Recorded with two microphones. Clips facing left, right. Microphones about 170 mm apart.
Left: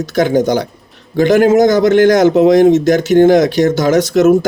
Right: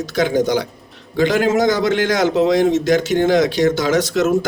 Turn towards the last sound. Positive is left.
turn(degrees=45)  # may be behind; listen again after turning